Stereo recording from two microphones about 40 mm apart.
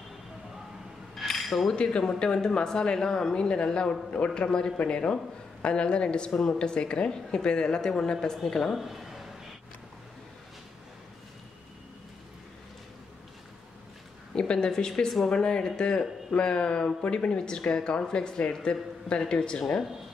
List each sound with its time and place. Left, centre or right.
1.3 s cutlery: centre
1.8 s speech: centre
8.7 s a sound: centre
14.3 s a woman's voice: left
15.0 s speech: centre
15.3 s speech: left